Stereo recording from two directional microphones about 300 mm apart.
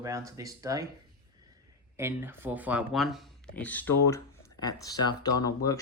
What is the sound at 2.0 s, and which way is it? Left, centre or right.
Speech, centre.